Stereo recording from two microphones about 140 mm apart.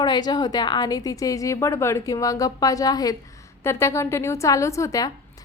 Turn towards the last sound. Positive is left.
turn(degrees=25)  # may be behind; listen again after turning